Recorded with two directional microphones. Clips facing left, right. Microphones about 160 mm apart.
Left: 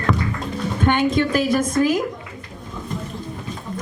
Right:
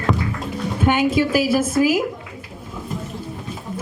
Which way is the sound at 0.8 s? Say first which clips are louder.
Right 1 dB; 10° right (ahead or behind).